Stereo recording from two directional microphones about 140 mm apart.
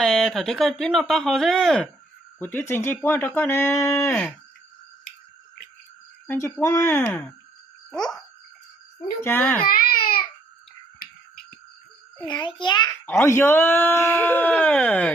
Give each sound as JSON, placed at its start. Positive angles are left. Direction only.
{"t": 0.0, "sound": "speech", "side_deg": 5}
{"t": 2.4, "sound": "speech", "side_deg": 15}
{"t": 6.2, "sound": "speech", "side_deg": 20}
{"t": 7.9, "sound": "a sound", "side_deg": 5}
{"t": 9.2, "sound": "speech", "side_deg": 15}
{"t": 9.7, "sound": "baby cry", "side_deg": 90}
{"t": 12.2, "sound": "a child's voice", "side_deg": 30}
{"t": 13.1, "sound": "speech", "side_deg": 15}